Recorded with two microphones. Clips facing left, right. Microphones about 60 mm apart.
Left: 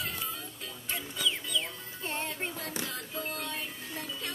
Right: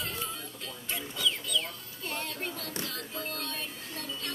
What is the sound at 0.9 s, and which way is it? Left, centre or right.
Music, centre.